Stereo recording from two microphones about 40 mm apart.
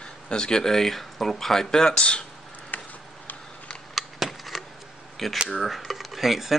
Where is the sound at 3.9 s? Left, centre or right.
Centre.